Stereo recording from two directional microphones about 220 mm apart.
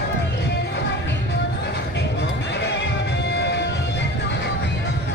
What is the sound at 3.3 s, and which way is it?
Music, 50° left (ahead or behind).